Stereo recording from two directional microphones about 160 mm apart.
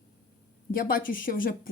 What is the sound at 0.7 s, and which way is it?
Speech, 65° left (ahead or behind).